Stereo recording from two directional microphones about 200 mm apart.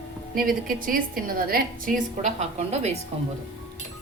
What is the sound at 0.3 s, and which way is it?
A woman's voice, 45° right (ahead or behind).